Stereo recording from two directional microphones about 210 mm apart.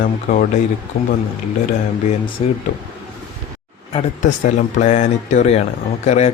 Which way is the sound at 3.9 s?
30° left (ahead or behind).